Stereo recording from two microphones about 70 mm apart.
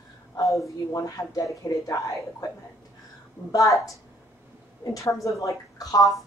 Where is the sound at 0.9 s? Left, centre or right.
Left.